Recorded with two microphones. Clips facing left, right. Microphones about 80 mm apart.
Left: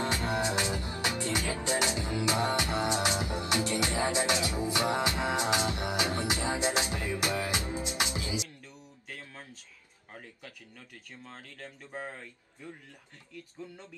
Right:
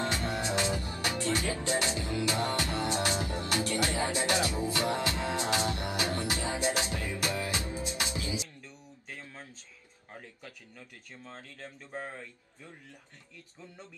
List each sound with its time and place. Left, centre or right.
0.0 s music: left